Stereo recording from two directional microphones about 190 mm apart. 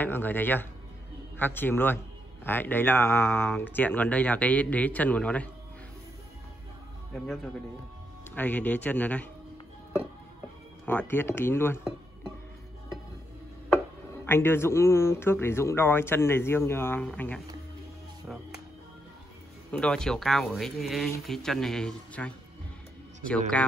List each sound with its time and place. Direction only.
0.0 s a man's voice: 10° left (ahead or behind)
8.4 s a man's voice: 10° left (ahead or behind)
10.9 s a man's voice: 10° left (ahead or behind)
14.2 s a man's voice: 10° left (ahead or behind)
19.7 s speech: 5° left (ahead or behind)